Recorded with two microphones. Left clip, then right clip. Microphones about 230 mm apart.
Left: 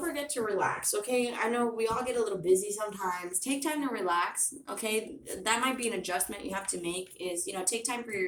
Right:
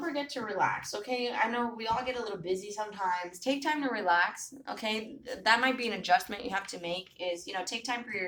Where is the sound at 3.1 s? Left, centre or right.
Centre.